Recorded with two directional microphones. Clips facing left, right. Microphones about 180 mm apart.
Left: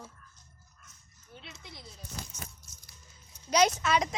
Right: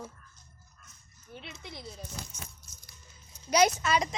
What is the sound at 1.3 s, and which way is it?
Speech, 70° right (ahead or behind).